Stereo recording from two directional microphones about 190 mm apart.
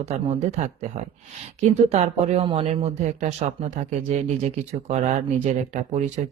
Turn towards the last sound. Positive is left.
turn(degrees=-35)  # may be behind; listen again after turning